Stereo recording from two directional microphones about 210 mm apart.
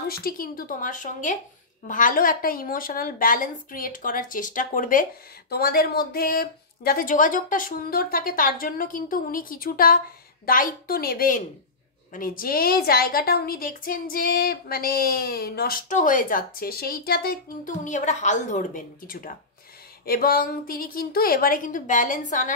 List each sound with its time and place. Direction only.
0.1 s a woman's voice: 45° left (ahead or behind)